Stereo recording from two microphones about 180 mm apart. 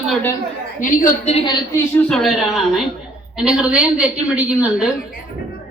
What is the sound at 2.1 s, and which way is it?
A woman's voice, centre (ahead or behind).